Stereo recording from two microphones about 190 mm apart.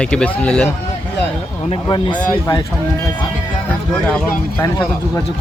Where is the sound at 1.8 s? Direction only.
25° left (ahead or behind).